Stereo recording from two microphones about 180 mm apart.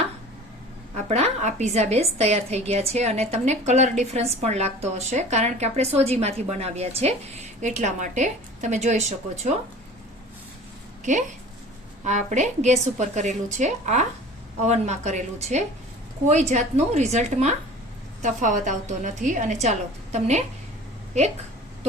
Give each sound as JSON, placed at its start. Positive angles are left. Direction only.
{"t": 0.9, "sound": "speech", "side_deg": -35}
{"t": 12.0, "sound": "a woman's voice", "side_deg": -40}